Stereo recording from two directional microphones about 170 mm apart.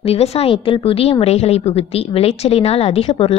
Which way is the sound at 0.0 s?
35° left (ahead or behind).